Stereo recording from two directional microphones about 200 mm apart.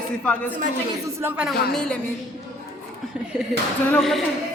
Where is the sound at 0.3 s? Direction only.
5° left (ahead or behind).